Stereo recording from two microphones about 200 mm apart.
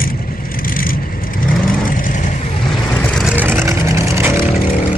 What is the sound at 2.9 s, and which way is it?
Vehicle, 5° left (ahead or behind).